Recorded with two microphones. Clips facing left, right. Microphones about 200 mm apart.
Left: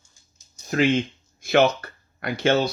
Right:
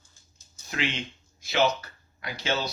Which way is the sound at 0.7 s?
45° left (ahead or behind).